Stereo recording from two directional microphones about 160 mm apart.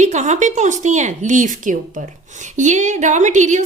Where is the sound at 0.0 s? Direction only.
45° right (ahead or behind).